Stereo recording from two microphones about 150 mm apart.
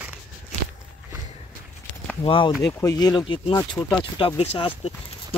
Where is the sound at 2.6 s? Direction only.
20° left (ahead or behind).